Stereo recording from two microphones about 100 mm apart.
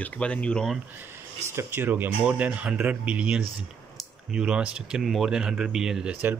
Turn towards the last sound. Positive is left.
turn(degrees=-5)  # may be behind; listen again after turning